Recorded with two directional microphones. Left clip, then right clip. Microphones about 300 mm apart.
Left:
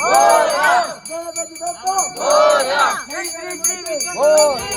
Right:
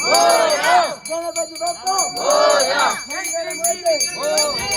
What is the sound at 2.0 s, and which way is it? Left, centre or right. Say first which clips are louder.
Speech: left 3 dB; centre.